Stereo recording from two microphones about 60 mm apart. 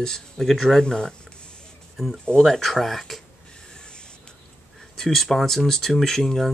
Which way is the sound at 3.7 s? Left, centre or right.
Centre.